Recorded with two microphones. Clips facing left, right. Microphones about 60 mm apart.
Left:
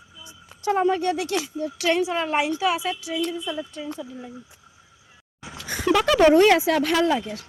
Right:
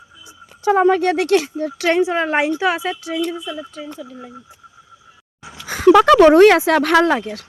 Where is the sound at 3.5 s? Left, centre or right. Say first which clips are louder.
Right 1 dB; centre.